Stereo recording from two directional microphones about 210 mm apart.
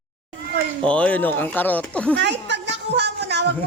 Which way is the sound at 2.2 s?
55° right (ahead or behind).